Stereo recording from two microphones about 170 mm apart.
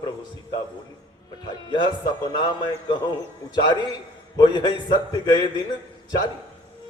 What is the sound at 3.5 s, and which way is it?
A man's voice, 25° left (ahead or behind).